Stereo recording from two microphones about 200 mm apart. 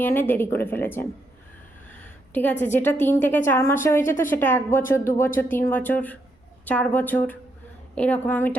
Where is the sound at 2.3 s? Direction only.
10° left (ahead or behind).